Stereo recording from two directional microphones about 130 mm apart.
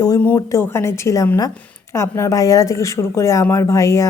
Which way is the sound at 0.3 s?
25° left (ahead or behind).